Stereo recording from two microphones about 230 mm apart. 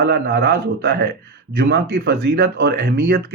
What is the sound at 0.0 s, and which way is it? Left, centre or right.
Speech, right.